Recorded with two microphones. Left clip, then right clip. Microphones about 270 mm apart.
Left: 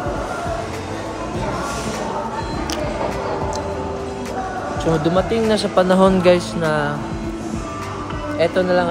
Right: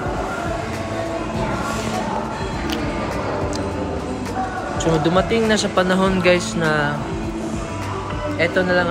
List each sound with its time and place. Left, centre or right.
5.0 s speech: centre
8.4 s speech: centre